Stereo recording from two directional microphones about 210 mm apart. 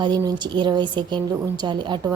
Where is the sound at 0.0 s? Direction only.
20° right (ahead or behind).